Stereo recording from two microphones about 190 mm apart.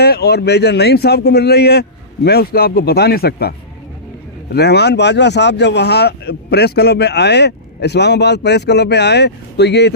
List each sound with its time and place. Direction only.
0.0 s speech: 55° left (ahead or behind)
4.5 s speech: 60° left (ahead or behind)